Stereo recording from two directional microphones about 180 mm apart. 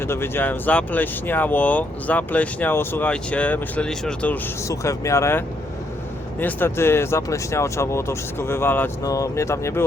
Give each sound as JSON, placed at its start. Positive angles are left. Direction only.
{"t": 0.0, "sound": "speech", "side_deg": 10}
{"t": 4.7, "sound": "speech", "side_deg": 15}
{"t": 6.4, "sound": "speech", "side_deg": 10}